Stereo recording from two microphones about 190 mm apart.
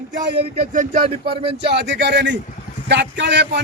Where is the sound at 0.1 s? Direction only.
45° right (ahead or behind).